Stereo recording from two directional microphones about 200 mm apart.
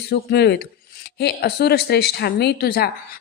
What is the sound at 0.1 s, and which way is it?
Speech, 55° left (ahead or behind).